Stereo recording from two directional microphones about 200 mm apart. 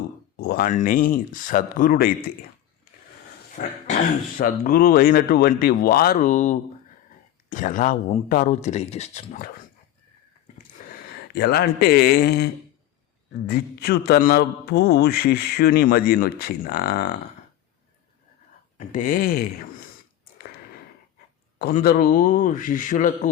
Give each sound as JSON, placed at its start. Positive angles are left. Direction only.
{"t": 0.3, "sound": "a man's voice", "side_deg": 50}
{"t": 3.5, "sound": "cough", "side_deg": 40}
{"t": 4.4, "sound": "a man's voice", "side_deg": 45}
{"t": 11.1, "sound": "speech", "side_deg": 50}
{"t": 13.5, "sound": "a man's voice", "side_deg": 50}
{"t": 18.8, "sound": "a man's voice", "side_deg": 40}
{"t": 21.6, "sound": "a man's voice", "side_deg": 45}